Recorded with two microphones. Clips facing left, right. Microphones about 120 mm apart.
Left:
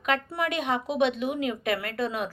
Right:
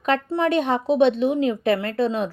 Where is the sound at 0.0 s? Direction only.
30° right (ahead or behind).